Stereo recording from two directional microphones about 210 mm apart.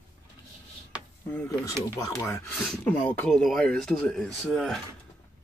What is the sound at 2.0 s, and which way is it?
Speech, 10° left (ahead or behind).